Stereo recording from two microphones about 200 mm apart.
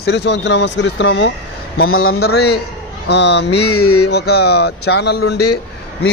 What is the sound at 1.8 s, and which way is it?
Speech, 90° left.